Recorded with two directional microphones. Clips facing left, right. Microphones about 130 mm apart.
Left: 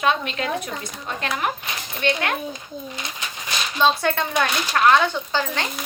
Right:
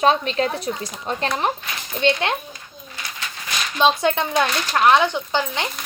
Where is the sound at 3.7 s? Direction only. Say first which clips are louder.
Right 2 dB; 15° right (ahead or behind).